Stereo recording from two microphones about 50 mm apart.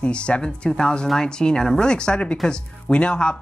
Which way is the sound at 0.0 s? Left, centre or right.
Left.